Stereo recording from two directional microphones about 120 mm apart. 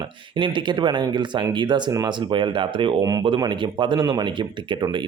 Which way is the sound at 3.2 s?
40° right (ahead or behind).